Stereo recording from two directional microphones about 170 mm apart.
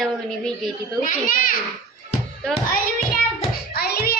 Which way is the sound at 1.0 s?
55° left (ahead or behind).